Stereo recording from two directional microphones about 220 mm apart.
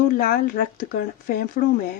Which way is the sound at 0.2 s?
40° left (ahead or behind).